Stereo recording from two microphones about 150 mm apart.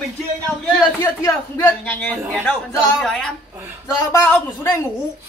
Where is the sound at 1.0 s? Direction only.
15° left (ahead or behind).